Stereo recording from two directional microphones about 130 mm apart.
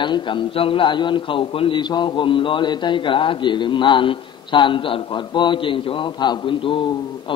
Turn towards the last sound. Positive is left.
turn(degrees=40)  # may be behind; listen again after turning